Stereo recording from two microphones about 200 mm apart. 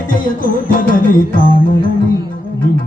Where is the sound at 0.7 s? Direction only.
45° left (ahead or behind).